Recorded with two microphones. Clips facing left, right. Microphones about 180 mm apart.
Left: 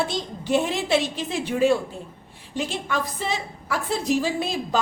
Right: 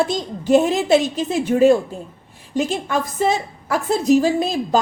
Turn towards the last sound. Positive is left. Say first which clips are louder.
# right 7 dB
turn(degrees=-40)  # may be behind; listen again after turning